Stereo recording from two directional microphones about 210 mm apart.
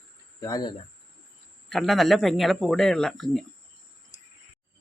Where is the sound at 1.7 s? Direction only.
Centre (ahead or behind).